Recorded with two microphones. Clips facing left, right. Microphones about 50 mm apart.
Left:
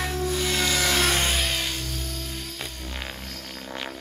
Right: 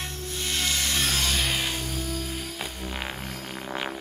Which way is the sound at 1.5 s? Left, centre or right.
Centre.